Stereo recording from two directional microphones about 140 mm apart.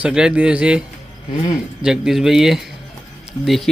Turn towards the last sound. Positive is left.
turn(degrees=0)  # may be behind; listen again after turning